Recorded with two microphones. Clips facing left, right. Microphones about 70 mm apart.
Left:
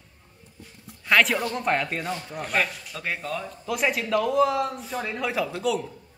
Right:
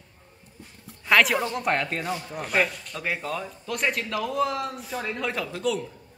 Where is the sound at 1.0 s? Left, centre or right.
Centre.